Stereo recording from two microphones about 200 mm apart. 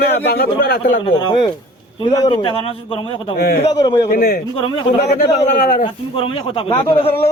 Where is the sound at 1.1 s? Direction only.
20° left (ahead or behind).